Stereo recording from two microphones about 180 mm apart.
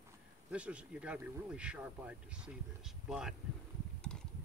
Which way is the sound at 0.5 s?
5° right (ahead or behind).